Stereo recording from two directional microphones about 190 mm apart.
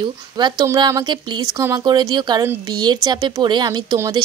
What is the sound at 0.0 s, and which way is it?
Speech, 25° right (ahead or behind).